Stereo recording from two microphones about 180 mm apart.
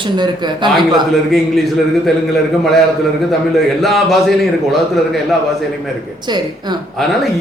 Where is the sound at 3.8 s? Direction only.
Centre (ahead or behind).